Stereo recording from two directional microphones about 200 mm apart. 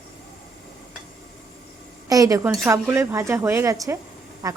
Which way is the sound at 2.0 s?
15° right (ahead or behind).